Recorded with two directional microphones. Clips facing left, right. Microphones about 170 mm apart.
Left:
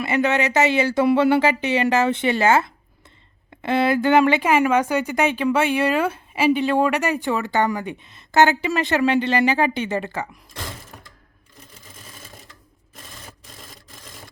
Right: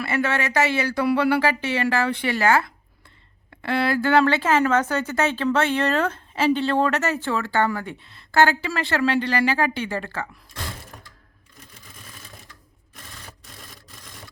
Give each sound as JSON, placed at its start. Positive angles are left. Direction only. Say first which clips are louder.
{"t": 0.0, "sound": "speech", "louder": "left 4 dB", "side_deg": 20}